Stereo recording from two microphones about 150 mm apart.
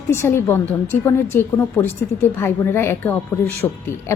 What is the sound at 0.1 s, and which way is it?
A woman's voice, 15° left (ahead or behind).